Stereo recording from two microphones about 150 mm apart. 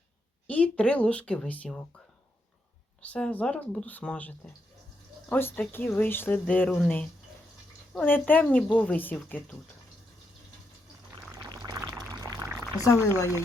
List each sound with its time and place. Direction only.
0.4 s speech: 10° left (ahead or behind)
3.0 s speech: 10° left (ahead or behind)
11.4 s pour: 25° right (ahead or behind)
12.8 s speech: 20° left (ahead or behind)